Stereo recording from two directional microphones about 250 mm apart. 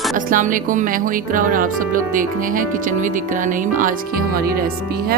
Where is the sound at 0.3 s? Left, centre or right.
Right.